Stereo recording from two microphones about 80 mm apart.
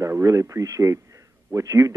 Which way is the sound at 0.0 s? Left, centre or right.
Right.